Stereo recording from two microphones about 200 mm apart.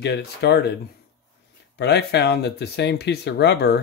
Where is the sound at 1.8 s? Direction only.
55° left (ahead or behind).